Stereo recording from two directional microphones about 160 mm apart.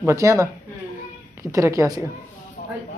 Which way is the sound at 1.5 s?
20° right (ahead or behind).